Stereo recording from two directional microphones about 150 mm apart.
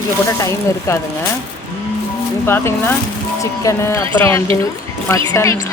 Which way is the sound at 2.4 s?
15° left (ahead or behind).